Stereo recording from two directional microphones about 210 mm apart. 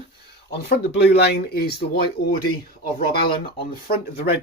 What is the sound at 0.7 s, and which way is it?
Speech, 50° left (ahead or behind).